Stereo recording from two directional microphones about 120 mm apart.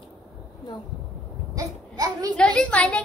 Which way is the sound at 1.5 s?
30° right (ahead or behind).